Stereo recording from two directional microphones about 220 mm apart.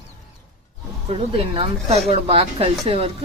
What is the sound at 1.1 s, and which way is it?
Speech, 25° right (ahead or behind).